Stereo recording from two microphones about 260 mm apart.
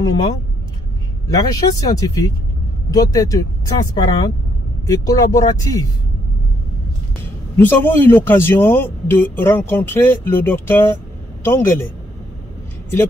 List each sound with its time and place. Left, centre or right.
1.3 s a man's voice: centre
7.5 s a man's voice: centre